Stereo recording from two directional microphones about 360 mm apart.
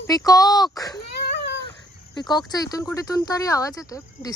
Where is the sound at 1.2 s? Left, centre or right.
Left.